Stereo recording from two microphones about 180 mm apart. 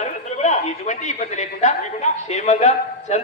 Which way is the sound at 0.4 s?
40° left (ahead or behind).